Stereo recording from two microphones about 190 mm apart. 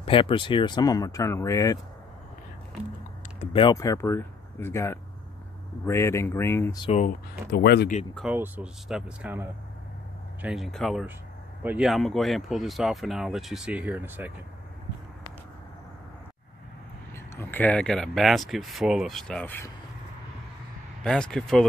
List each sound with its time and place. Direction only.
0.0 s speech: 25° left (ahead or behind)
3.5 s speech: 20° left (ahead or behind)
6.8 s speech: 35° left (ahead or behind)
7.5 s speech: 60° left (ahead or behind)
8.3 s speech: 10° right (ahead or behind)
17.1 s speech: 10° left (ahead or behind)
21.0 s speech: 5° left (ahead or behind)